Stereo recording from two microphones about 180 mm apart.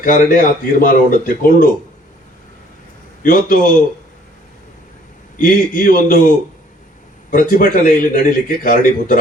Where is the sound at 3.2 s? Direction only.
50° left (ahead or behind).